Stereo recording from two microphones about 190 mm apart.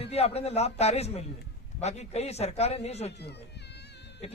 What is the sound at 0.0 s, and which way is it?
Speech, 30° left (ahead or behind).